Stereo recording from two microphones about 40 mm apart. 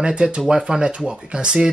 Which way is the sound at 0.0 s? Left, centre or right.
Right.